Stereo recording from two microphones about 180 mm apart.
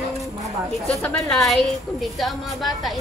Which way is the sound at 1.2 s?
Centre (ahead or behind).